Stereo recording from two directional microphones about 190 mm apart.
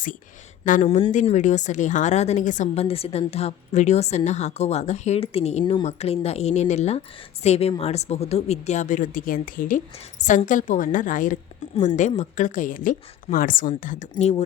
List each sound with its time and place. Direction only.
0.6 s a woman's voice: 45° left (ahead or behind)